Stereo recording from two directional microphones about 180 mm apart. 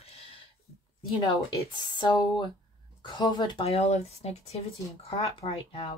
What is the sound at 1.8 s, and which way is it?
Speech, 25° left (ahead or behind).